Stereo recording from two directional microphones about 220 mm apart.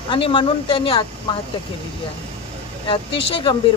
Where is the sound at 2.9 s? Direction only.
25° left (ahead or behind).